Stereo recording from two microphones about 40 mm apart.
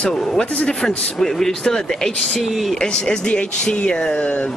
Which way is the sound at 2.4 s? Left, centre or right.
Centre.